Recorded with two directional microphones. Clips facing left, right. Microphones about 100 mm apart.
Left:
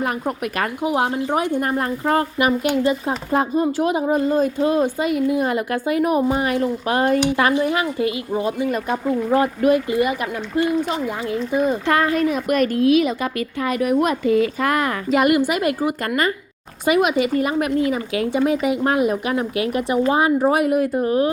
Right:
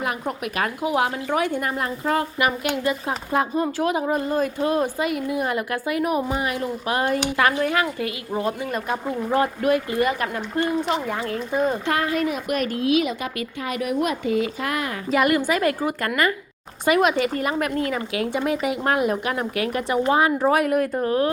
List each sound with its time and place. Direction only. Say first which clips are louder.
0.0 s speech: left 3 dB; 40° left (ahead or behind)
0.8 s speech: left 3 dB; 25° left (ahead or behind)
3.6 s speech: left 3 dB; 20° left (ahead or behind)
10.0 s a woman's voice: left 2 dB; 10° left (ahead or behind)
11.9 s a woman's voice: left 4 dB; 40° left (ahead or behind)
15.1 s speech: left 2 dB; 20° left (ahead or behind)
16.0 s speech: even; 25° left (ahead or behind)
16.8 s a woman's voice: left 2 dB; 15° left (ahead or behind)